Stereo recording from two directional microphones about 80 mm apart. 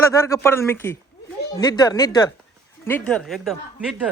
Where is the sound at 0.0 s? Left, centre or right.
Left.